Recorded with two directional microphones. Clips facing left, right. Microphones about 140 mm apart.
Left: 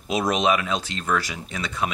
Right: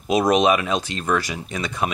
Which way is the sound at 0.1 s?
15° right (ahead or behind).